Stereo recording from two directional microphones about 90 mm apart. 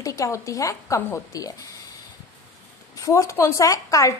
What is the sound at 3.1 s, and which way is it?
A woman's voice, 35° left (ahead or behind).